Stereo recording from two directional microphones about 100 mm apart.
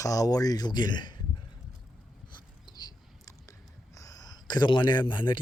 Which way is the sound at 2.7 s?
45° left (ahead or behind).